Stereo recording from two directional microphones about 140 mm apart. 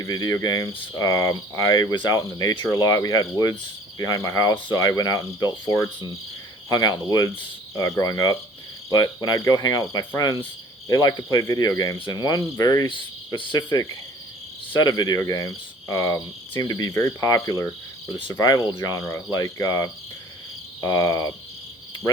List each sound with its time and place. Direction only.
0.0 s cricket: 25° left (ahead or behind)
12.9 s speech: 35° left (ahead or behind)
14.8 s cricket: 30° left (ahead or behind)